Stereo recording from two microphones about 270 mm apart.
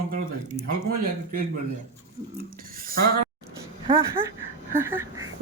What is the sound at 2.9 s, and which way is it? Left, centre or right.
Speech, right.